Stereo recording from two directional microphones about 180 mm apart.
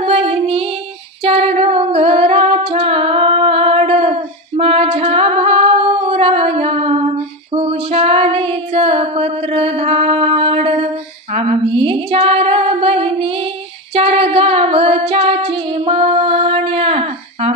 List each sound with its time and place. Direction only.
0.0 s music: 30° right (ahead or behind)
1.2 s female singing: 35° right (ahead or behind)
13.9 s singing: 30° right (ahead or behind)